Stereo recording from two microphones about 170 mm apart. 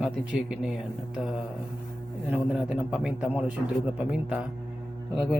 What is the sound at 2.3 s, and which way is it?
A man's voice, 10° right (ahead or behind).